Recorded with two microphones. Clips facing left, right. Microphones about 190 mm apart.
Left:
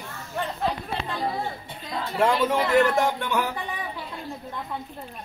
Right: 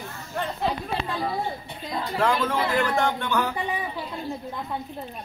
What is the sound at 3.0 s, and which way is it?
Speech, 5° left (ahead or behind).